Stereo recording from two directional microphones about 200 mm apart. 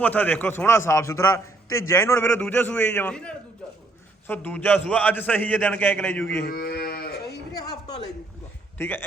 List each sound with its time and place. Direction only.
0.0 s a man's voice: 10° left (ahead or behind)
6.4 s livestock: 50° left (ahead or behind)
7.5 s a sound: 20° left (ahead or behind)
8.8 s a man's voice: 10° left (ahead or behind)